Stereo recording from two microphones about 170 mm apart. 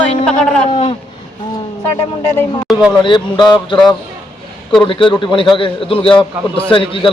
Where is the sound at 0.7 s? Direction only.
25° left (ahead or behind).